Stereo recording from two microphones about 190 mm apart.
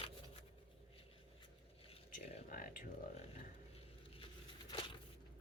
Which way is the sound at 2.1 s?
45° left (ahead or behind).